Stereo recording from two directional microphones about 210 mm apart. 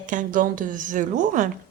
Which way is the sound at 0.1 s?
40° right (ahead or behind).